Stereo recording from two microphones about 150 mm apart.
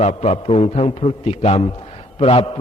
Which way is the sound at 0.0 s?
45° left (ahead or behind).